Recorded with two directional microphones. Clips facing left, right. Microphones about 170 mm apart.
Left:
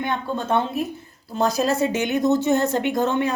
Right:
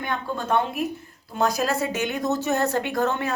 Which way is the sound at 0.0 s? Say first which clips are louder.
Left 3 dB; 25° left (ahead or behind).